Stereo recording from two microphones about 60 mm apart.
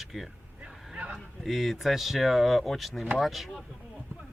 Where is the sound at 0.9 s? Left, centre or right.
Right.